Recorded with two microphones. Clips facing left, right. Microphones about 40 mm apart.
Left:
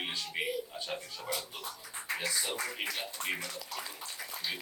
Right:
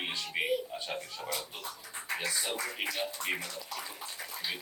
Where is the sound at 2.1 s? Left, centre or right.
Centre.